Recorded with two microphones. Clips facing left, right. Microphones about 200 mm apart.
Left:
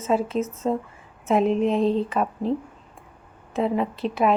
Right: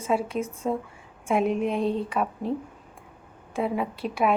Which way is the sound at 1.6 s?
25° left (ahead or behind).